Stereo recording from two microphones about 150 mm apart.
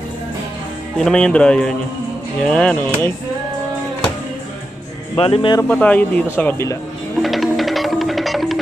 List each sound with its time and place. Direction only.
0.9 s speech: 5° left (ahead or behind)
5.1 s speech: 35° left (ahead or behind)
5.6 s speech: 10° left (ahead or behind)
7.2 s music: centre (ahead or behind)